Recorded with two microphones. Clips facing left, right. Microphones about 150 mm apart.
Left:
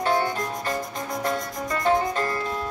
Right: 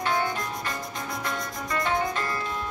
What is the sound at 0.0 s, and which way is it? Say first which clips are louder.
Music: left 3 dB; 40° left (ahead or behind).